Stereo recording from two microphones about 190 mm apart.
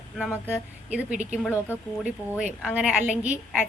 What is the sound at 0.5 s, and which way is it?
Speech, 5° right (ahead or behind).